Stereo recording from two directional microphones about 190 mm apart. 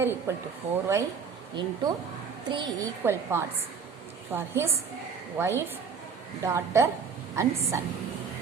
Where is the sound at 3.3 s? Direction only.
15° right (ahead or behind).